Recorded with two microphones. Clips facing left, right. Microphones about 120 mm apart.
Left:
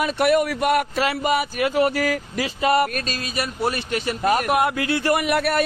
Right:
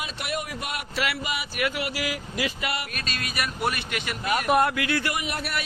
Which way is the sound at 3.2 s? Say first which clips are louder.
Left 2 dB; 30° left (ahead or behind).